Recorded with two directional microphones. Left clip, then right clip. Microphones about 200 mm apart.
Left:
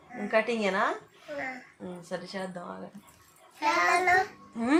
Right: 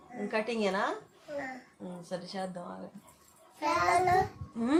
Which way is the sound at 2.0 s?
25° left (ahead or behind).